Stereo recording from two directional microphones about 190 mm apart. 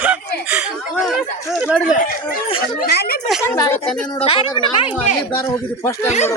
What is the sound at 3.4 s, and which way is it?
Speech, 15° left (ahead or behind).